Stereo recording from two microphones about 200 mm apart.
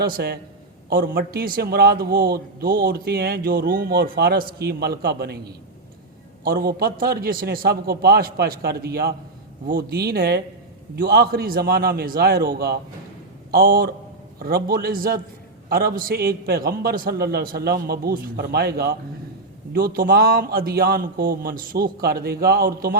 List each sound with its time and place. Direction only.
0.0 s a man's voice: 50° right (ahead or behind)
6.4 s a man's voice: 50° right (ahead or behind)